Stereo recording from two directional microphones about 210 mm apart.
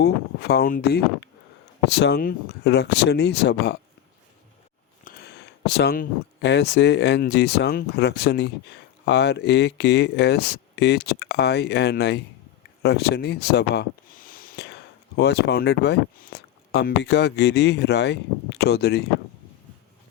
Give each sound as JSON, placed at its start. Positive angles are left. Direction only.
{"t": 0.0, "sound": "speech", "side_deg": 50}
{"t": 5.0, "sound": "speech", "side_deg": 50}